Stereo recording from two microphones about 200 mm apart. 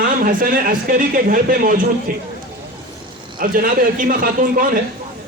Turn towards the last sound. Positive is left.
turn(degrees=-45)  # may be behind; listen again after turning